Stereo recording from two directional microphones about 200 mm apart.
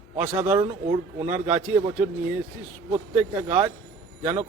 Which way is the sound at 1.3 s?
10° right (ahead or behind).